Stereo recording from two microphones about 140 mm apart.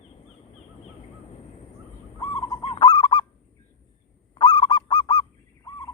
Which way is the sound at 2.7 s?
30° left (ahead or behind).